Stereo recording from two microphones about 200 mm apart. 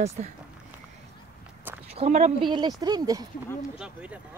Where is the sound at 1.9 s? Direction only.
30° right (ahead or behind).